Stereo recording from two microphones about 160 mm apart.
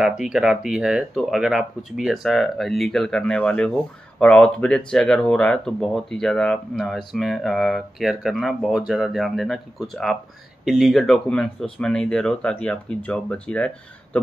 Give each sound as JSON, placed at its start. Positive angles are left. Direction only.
{"t": 0.0, "sound": "speech", "side_deg": -5}